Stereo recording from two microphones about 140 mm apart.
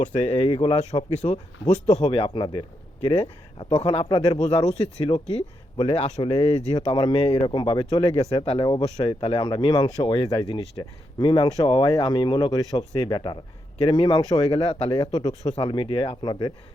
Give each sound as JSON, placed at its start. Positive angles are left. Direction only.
{"t": 0.1, "sound": "speech", "side_deg": 35}
{"t": 1.9, "sound": "speech", "side_deg": 35}
{"t": 15.5, "sound": "speech", "side_deg": 40}